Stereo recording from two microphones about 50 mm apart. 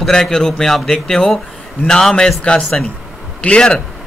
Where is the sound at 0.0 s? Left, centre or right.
Centre.